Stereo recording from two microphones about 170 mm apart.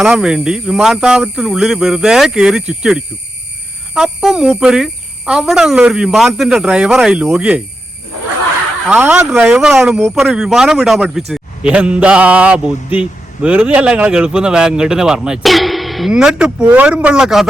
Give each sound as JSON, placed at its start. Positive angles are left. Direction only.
{"t": 0.0, "sound": "mantra", "side_deg": -5}
{"t": 8.9, "sound": "mantra", "side_deg": -10}